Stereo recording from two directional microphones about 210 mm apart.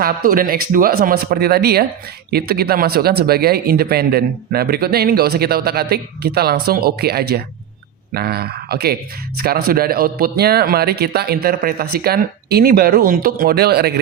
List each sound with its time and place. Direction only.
0.0 s speech: 40° right (ahead or behind)